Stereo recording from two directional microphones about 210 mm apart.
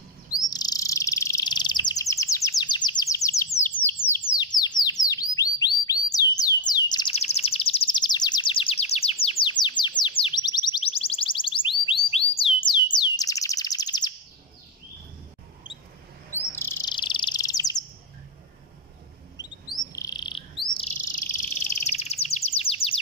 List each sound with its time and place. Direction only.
0.3 s chirp: 20° left (ahead or behind)
3.5 s bird: 10° left (ahead or behind)
16.3 s chirp: 10° left (ahead or behind)
16.9 s bird: 25° left (ahead or behind)
19.4 s chirp: 5° right (ahead or behind)
19.9 s chirp: 15° left (ahead or behind)
21.0 s bird: 40° left (ahead or behind)